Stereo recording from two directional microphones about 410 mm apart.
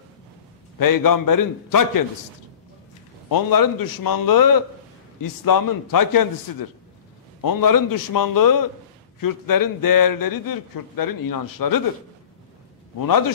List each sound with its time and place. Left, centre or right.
0.7 s a man's voice: left
3.3 s a man's voice: left
13.0 s a man's voice: left